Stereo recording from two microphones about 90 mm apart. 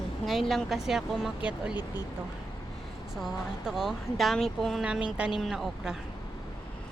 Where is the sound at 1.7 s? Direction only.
50° left (ahead or behind).